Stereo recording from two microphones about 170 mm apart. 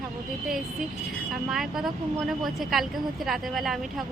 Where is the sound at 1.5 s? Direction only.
Centre (ahead or behind).